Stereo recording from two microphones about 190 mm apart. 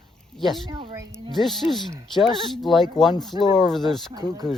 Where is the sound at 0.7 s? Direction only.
25° right (ahead or behind).